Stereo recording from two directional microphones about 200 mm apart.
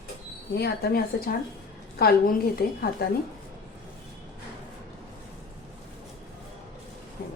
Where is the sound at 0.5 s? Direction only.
55° left (ahead or behind).